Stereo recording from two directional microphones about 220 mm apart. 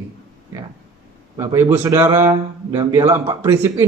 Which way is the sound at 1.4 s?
10° right (ahead or behind).